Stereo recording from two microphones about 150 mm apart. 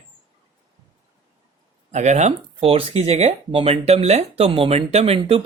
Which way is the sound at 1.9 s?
50° right (ahead or behind).